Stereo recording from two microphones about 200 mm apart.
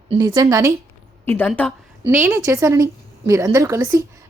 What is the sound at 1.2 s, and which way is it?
Speech, 10° left (ahead or behind).